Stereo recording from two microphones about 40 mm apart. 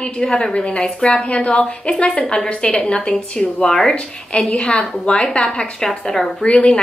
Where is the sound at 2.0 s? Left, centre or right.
Left.